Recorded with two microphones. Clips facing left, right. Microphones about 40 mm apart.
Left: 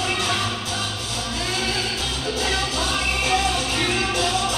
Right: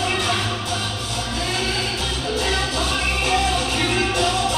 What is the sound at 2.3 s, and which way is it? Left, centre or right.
Music, centre.